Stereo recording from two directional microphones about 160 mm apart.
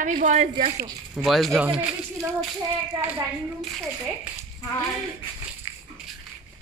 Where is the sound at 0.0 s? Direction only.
50° right (ahead or behind).